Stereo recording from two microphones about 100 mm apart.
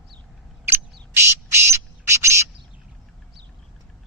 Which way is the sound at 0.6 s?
25° right (ahead or behind).